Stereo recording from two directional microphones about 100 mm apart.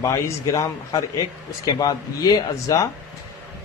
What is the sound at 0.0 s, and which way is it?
Speech, 35° left (ahead or behind).